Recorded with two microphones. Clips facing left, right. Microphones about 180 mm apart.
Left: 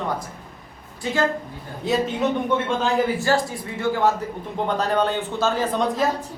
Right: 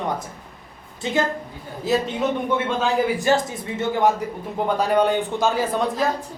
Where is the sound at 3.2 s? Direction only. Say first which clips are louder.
Right 1 dB; 20° right (ahead or behind).